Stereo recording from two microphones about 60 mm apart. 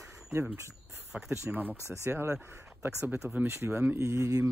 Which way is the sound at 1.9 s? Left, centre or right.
Right.